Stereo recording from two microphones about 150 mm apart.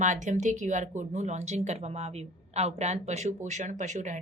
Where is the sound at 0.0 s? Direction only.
55° right (ahead or behind).